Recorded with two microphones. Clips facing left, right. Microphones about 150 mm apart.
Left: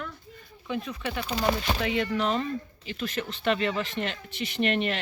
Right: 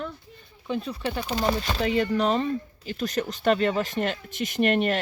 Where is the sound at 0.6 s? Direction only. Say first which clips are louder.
Right 3 dB; 35° right (ahead or behind).